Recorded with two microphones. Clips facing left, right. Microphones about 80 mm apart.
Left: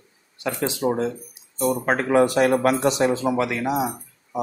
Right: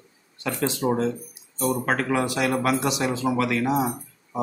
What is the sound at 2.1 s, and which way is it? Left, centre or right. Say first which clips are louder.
Speech: left 10 dB; left.